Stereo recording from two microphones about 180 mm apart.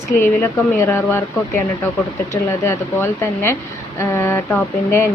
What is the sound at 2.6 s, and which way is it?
A woman's voice, 15° left (ahead or behind).